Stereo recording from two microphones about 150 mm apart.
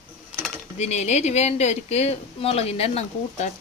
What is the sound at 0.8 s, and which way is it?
Speech, 45° left (ahead or behind).